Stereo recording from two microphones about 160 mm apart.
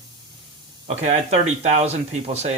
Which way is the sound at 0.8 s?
45° right (ahead or behind).